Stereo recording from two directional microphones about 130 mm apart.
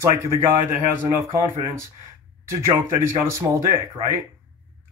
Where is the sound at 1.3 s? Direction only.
20° right (ahead or behind).